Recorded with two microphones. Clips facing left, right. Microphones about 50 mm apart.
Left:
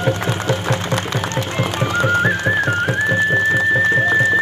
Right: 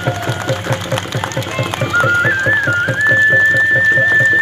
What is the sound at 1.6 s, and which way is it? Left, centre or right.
Music, right.